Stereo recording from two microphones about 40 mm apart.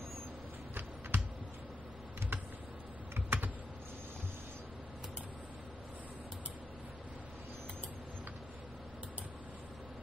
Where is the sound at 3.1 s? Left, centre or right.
Right.